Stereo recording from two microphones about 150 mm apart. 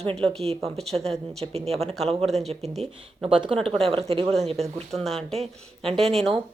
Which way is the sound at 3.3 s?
35° right (ahead or behind).